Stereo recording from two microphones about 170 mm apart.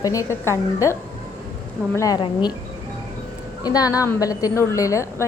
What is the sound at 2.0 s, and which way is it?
Speech, 20° left (ahead or behind).